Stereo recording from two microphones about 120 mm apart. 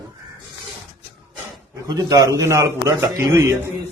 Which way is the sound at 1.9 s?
30° right (ahead or behind).